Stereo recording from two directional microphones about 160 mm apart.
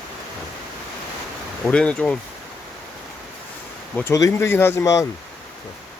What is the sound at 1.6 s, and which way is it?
Speech, 5° left (ahead or behind).